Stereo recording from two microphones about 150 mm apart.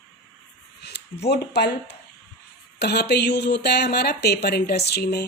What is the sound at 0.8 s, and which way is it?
Speech, 90° left.